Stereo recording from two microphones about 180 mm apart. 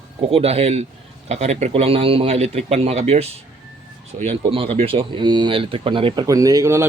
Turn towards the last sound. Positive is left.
turn(degrees=-15)  # may be behind; listen again after turning